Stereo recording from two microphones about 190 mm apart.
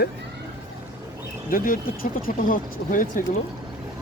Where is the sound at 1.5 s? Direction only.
45° left (ahead or behind).